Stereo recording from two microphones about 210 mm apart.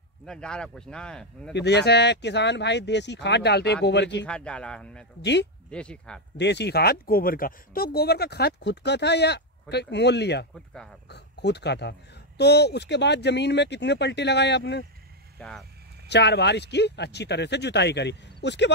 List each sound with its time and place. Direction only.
0.3 s speech: 5° left (ahead or behind)
1.5 s speech: 55° left (ahead or behind)
4.3 s speech: 5° left (ahead or behind)
5.2 s speech: 55° left (ahead or behind)
5.7 s speech: 5° left (ahead or behind)
6.3 s speech: 55° left (ahead or behind)
15.3 s speech: 5° left (ahead or behind)
16.1 s speech: 55° left (ahead or behind)